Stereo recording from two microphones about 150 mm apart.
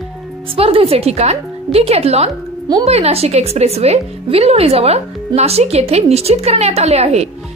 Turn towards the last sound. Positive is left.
turn(degrees=-45)  # may be behind; listen again after turning